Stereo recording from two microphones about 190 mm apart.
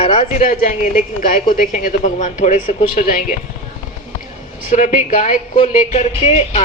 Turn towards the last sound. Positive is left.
turn(degrees=35)  # may be behind; listen again after turning